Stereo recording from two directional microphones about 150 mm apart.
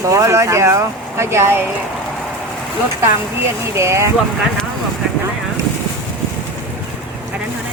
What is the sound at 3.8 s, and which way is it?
Speech, 20° right (ahead or behind).